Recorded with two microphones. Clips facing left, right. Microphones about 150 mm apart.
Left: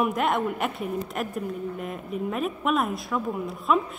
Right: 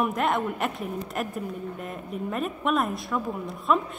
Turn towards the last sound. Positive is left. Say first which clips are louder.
# left 1 dB
turn(degrees=0)  # may be behind; listen again after turning